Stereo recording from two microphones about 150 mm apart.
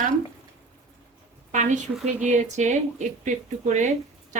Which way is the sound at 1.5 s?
55° right (ahead or behind).